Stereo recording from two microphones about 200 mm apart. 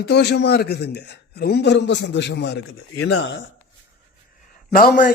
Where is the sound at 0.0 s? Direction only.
55° left (ahead or behind).